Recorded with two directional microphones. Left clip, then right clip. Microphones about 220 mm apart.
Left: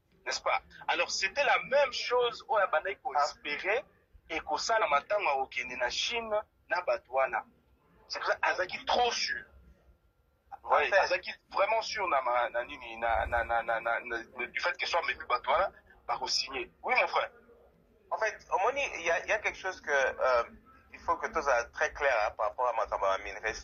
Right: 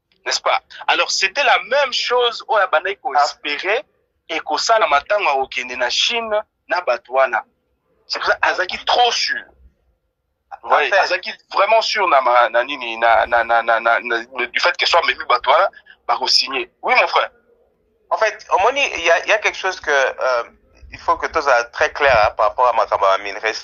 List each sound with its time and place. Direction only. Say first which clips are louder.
0.2 s a man's voice: right 13 dB; 40° right (ahead or behind)
10.5 s a man's voice: right 11 dB; 35° right (ahead or behind)